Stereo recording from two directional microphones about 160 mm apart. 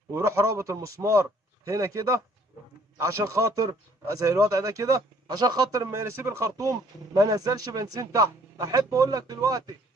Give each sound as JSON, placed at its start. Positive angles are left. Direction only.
{"t": 0.1, "sound": "a man's voice", "side_deg": -15}